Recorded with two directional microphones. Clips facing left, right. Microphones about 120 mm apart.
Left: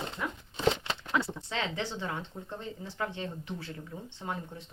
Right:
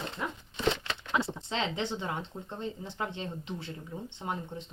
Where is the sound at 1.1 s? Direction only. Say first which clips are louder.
Right 1 dB; 20° right (ahead or behind).